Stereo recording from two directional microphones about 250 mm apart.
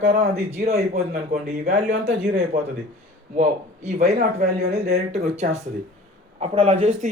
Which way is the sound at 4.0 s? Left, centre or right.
Right.